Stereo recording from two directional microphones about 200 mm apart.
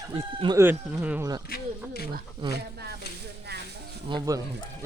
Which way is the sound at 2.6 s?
55° right (ahead or behind).